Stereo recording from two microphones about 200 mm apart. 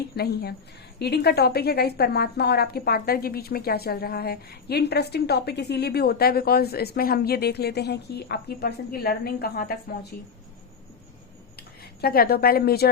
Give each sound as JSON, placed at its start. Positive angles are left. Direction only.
{"t": 0.2, "sound": "a woman's voice", "side_deg": 50}
{"t": 11.9, "sound": "a woman's voice", "side_deg": 50}